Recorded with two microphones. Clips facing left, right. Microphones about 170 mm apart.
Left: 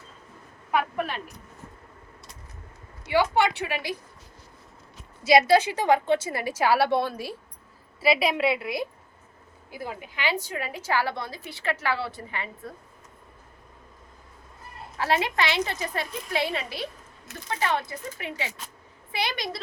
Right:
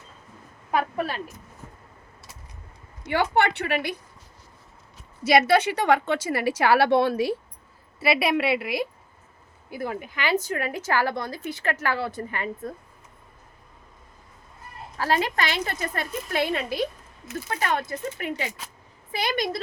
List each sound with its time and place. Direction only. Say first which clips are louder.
0.7 s a woman's voice: right 1 dB; 35° right (ahead or behind)
3.1 s a woman's voice: even; 55° right (ahead or behind)
5.3 s a woman's voice: even; 65° right (ahead or behind)
8.0 s a woman's voice: even; 60° right (ahead or behind)
9.8 s a woman's voice: right 2 dB; 50° right (ahead or behind)
14.9 s a woman's voice: right 1 dB; 40° right (ahead or behind)